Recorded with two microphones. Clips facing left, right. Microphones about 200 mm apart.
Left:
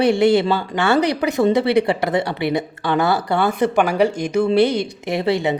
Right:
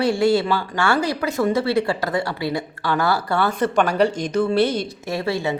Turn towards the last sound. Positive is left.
turn(degrees=20)  # may be behind; listen again after turning